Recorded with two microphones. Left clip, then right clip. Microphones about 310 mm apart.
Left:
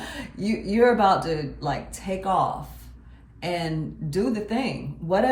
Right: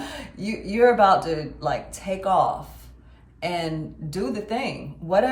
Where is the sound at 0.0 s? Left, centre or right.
Centre.